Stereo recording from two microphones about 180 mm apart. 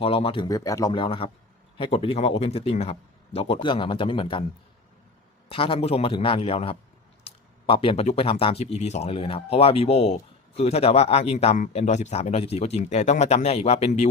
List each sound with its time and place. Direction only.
0.0 s speech: 30° left (ahead or behind)
0.4 s speech: 20° left (ahead or behind)
5.5 s speech: 30° left (ahead or behind)